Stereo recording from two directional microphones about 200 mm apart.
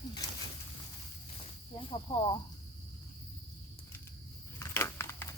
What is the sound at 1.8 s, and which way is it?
Speech, 25° left (ahead or behind).